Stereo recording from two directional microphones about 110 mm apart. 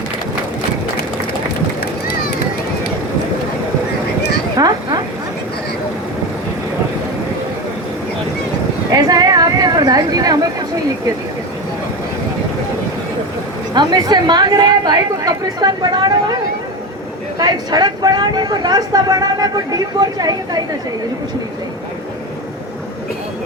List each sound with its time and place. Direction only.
4.5 s a sound: 35° right (ahead or behind)
8.9 s chatter: 35° right (ahead or behind)
13.7 s speech: 40° right (ahead or behind)
17.3 s speech: 35° right (ahead or behind)